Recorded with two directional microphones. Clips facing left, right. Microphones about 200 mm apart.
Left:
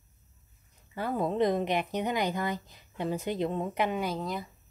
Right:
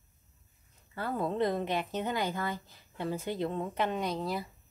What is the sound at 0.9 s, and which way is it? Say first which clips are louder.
A woman's voice: left 3 dB; 15° left (ahead or behind).